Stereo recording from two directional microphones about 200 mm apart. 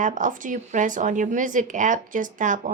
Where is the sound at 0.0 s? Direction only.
40° right (ahead or behind).